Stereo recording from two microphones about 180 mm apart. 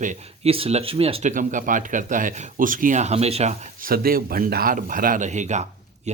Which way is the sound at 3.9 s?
55° right (ahead or behind).